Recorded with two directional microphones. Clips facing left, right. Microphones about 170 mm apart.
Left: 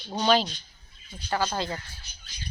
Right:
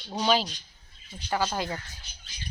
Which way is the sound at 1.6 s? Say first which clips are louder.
Left 1 dB; 15° right (ahead or behind).